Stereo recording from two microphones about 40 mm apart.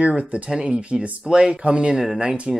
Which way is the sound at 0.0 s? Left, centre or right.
Right.